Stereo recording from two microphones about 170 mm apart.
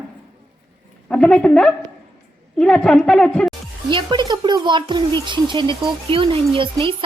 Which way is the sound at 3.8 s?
25° right (ahead or behind).